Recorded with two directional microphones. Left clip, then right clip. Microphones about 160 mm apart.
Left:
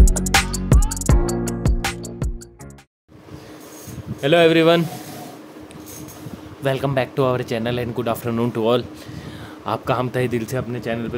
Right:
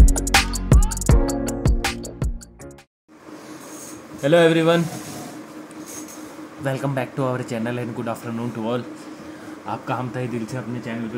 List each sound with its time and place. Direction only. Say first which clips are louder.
0.1 s music: right 1 dB; centre (ahead or behind)
4.2 s a man's voice: left 2 dB; 30° left (ahead or behind)
6.6 s a man's voice: left 4 dB; 35° left (ahead or behind)
8.4 s speech: left 10 dB; 55° left (ahead or behind)